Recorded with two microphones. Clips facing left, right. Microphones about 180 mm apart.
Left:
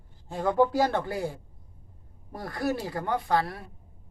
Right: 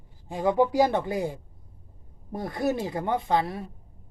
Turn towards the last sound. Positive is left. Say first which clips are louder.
# right 1 dB
turn(degrees=-20)  # may be behind; listen again after turning